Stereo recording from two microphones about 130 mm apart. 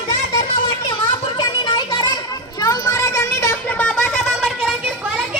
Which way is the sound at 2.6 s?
25° left (ahead or behind).